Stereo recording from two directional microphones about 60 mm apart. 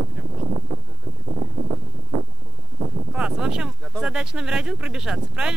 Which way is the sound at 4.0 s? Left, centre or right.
Centre.